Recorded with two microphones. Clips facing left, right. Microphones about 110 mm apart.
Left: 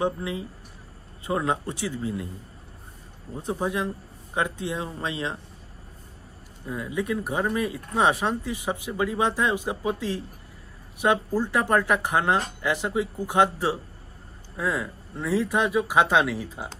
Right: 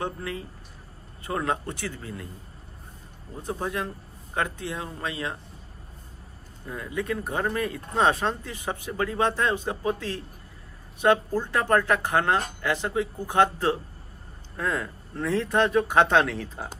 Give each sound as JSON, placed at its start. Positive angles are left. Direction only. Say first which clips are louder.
{"t": 0.0, "sound": "speech", "louder": "left 5 dB", "side_deg": 15}
{"t": 3.4, "sound": "speech", "louder": "left 3 dB", "side_deg": 15}
{"t": 6.6, "sound": "speech", "louder": "left 2 dB", "side_deg": 15}